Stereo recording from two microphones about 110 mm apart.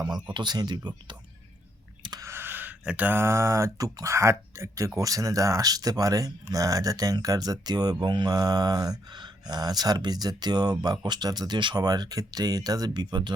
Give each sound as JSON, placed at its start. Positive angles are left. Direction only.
{"t": 0.3, "sound": "speech", "side_deg": -40}
{"t": 2.0, "sound": "a sound", "side_deg": -35}
{"t": 2.3, "sound": "speech", "side_deg": -20}